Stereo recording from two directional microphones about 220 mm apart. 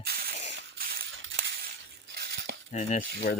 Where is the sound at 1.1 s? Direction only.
60° right (ahead or behind).